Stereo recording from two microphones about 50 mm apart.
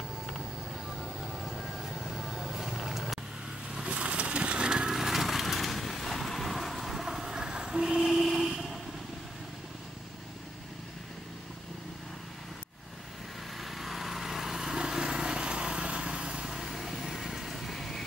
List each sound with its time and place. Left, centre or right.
1.2 s vehicle: centre
3.7 s vehicle: centre
13.6 s vehicle: centre
16.4 s vehicle: centre